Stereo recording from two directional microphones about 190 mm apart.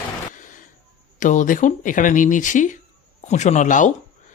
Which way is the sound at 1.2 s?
40° left (ahead or behind).